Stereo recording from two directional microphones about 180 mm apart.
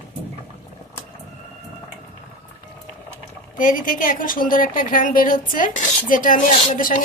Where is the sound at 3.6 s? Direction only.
50° left (ahead or behind).